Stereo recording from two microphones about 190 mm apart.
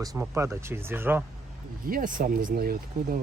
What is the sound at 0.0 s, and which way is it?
Speech, 15° right (ahead or behind).